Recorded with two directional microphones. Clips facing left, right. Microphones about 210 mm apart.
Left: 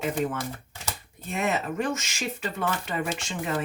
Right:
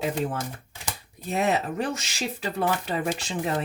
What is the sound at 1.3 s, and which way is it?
Speech, 35° right (ahead or behind).